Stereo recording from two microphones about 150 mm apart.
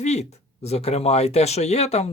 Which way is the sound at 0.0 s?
45° left (ahead or behind).